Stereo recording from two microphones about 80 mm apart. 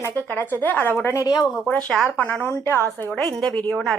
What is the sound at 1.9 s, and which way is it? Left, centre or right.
Speech, centre.